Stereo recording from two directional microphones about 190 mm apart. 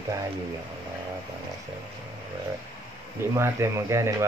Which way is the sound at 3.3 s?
15° right (ahead or behind).